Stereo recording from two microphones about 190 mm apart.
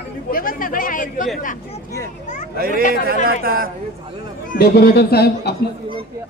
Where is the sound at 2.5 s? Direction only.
50° right (ahead or behind).